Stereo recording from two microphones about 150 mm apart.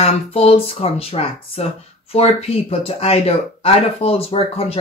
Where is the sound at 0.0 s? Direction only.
40° left (ahead or behind).